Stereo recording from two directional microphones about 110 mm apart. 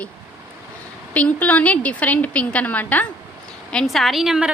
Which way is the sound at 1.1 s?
10° left (ahead or behind).